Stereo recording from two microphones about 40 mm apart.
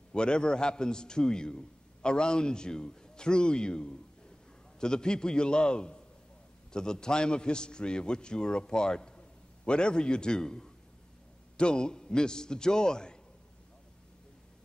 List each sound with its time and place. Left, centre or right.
0.1 s a man's voice: left